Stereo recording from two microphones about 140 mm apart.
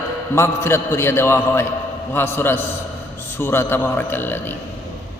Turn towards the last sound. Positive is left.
turn(degrees=15)  # may be behind; listen again after turning